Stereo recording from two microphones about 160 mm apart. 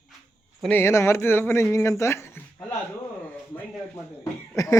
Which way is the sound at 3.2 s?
10° left (ahead or behind).